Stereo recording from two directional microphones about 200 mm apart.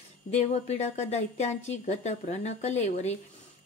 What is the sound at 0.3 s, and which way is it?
A woman's voice, 35° left (ahead or behind).